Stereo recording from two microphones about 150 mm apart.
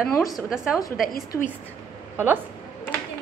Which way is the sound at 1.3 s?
10° left (ahead or behind).